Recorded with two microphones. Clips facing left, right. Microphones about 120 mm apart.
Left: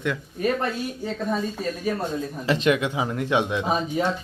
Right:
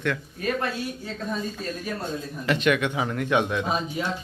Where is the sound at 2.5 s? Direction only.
30° left (ahead or behind).